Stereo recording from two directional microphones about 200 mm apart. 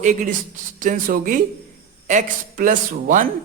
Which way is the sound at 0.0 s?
40° right (ahead or behind).